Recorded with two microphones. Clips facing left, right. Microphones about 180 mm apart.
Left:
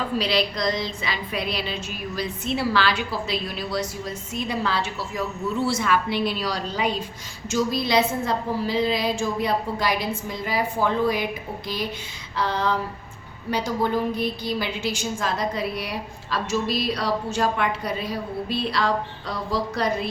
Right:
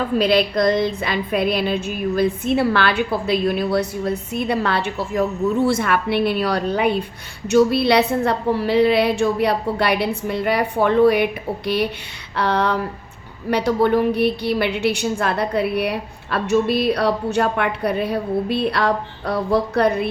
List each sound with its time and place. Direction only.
0.2 s a woman's voice: 50° right (ahead or behind)
12.4 s a sound: 65° right (ahead or behind)
13.5 s a woman's voice: 65° right (ahead or behind)